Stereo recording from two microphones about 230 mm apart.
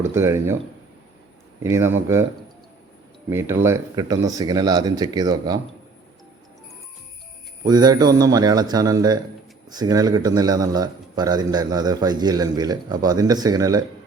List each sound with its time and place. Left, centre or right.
0.1 s speech: centre
1.6 s a man's voice: centre
3.2 s a man's voice: centre
7.7 s a man's voice: centre